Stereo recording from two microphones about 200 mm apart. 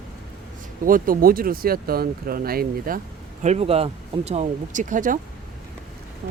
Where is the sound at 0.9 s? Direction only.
45° right (ahead or behind).